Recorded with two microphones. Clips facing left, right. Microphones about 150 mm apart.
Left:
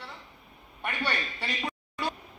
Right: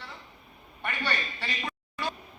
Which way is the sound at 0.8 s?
5° left (ahead or behind).